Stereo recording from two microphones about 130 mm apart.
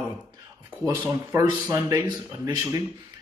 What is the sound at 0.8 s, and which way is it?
Speech, 25° right (ahead or behind).